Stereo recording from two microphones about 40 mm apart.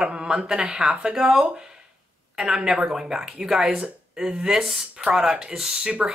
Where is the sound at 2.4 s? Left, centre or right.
Centre.